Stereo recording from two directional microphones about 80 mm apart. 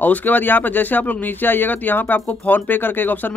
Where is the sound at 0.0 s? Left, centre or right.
Left.